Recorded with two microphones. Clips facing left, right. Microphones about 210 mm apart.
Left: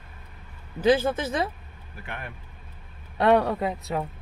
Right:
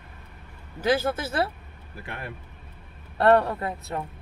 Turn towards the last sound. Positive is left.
turn(degrees=0)  # may be behind; listen again after turning